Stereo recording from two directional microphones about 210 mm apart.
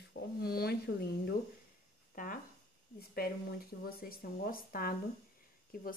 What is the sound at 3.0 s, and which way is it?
A woman's voice, 45° left (ahead or behind).